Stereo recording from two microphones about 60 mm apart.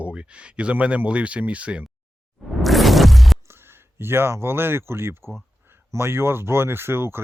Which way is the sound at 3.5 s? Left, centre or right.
Right.